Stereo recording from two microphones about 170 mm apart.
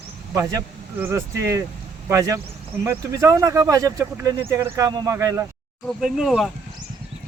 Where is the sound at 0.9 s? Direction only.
15° right (ahead or behind).